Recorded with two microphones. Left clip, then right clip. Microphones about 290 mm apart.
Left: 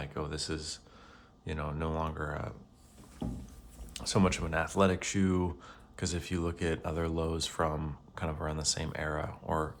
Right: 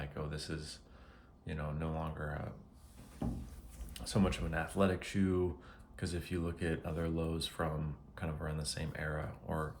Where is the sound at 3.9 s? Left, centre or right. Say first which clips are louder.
Left 6 dB; left.